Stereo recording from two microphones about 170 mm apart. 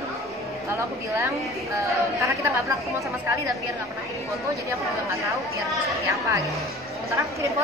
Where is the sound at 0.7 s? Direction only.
15° right (ahead or behind).